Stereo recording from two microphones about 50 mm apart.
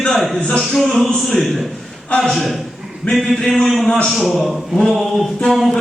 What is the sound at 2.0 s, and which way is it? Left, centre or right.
Speech, centre.